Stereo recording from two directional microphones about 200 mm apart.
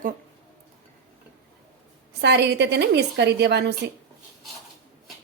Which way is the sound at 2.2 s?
55° right (ahead or behind).